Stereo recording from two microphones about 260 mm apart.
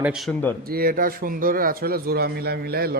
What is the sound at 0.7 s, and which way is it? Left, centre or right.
Speech, right.